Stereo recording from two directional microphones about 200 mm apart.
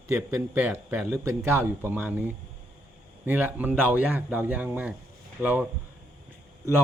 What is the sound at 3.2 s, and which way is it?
Speech, 10° right (ahead or behind).